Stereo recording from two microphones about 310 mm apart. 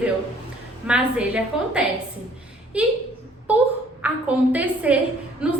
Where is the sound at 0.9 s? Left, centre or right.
Centre.